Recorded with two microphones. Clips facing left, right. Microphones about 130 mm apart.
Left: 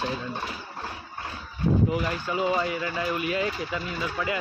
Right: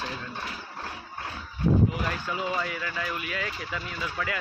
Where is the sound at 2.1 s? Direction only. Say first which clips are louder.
Left 4 dB; 25° left (ahead or behind).